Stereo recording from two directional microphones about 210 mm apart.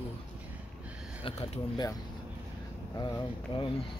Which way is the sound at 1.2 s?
25° left (ahead or behind).